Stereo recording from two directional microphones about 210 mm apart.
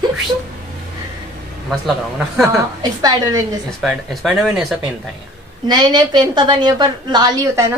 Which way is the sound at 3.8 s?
Centre (ahead or behind).